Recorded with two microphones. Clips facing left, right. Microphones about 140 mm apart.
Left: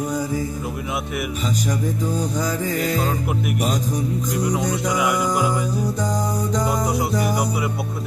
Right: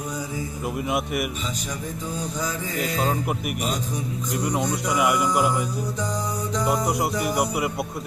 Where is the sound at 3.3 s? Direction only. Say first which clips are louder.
Left 4 dB; centre (ahead or behind).